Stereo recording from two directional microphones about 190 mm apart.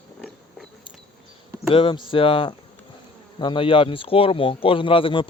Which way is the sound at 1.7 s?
25° left (ahead or behind).